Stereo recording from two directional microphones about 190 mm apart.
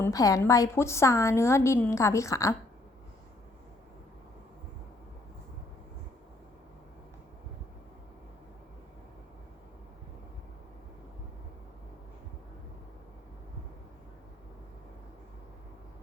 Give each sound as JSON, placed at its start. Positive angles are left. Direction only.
{"t": 0.0, "sound": "a woman's voice", "side_deg": 20}